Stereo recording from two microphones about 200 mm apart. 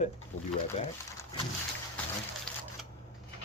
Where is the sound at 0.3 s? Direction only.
90° left.